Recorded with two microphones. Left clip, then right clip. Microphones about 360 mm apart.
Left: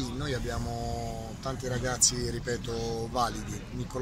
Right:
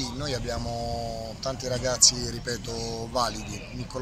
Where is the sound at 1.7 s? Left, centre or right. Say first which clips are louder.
Right 6 dB; centre.